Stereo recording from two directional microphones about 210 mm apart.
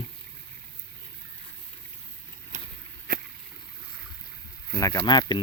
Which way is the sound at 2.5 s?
35° right (ahead or behind).